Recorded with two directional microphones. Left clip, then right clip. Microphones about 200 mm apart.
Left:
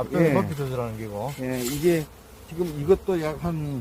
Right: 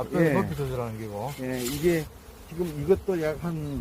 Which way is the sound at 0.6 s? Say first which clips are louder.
Left 2 dB; 5° right (ahead or behind).